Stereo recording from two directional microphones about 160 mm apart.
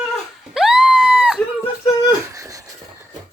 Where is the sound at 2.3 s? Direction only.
20° right (ahead or behind).